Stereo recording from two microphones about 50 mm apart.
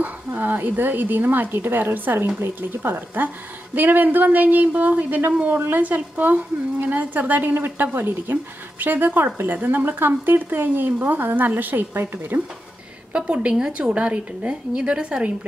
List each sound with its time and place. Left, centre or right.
0.0 s a woman's voice: right
13.1 s a woman's voice: right